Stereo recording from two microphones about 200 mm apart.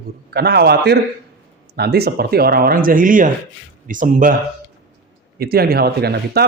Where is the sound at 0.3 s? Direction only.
50° right (ahead or behind).